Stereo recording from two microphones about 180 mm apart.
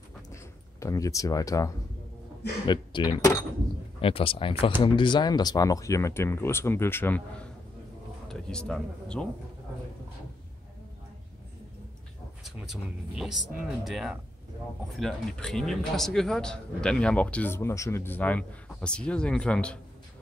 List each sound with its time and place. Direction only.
0.3 s a sound: 15° left (ahead or behind)
2.6 s speech: 25° left (ahead or behind)
4.0 s speech: 30° left (ahead or behind); by 9.3 s 5° left (ahead or behind)
13.8 s speech: centre (ahead or behind)